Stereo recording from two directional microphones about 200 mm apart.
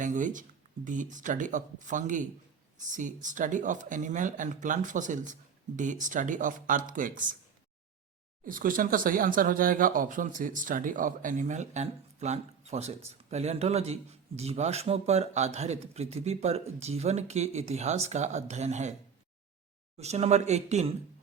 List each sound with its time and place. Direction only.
0.0 s speech: 40° right (ahead or behind)
8.4 s speech: 45° right (ahead or behind)
20.0 s speech: 30° right (ahead or behind)